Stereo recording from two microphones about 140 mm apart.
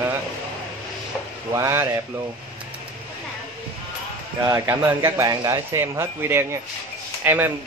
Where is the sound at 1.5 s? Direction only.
20° right (ahead or behind).